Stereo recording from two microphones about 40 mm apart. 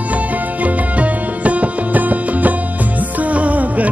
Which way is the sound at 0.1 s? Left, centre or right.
Right.